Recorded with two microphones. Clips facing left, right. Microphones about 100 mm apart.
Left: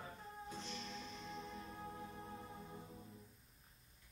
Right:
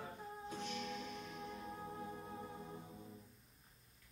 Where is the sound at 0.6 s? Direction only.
60° right (ahead or behind).